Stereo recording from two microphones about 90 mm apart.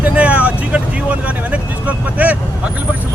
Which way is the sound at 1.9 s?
15° right (ahead or behind).